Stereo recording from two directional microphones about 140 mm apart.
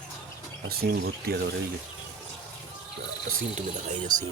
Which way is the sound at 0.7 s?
90° right.